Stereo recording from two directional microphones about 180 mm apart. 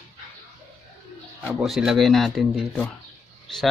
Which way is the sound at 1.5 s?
Centre (ahead or behind).